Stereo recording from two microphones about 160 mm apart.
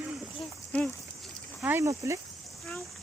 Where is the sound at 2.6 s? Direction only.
Centre (ahead or behind).